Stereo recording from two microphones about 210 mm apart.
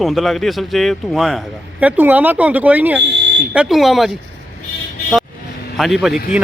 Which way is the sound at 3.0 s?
60° right (ahead or behind).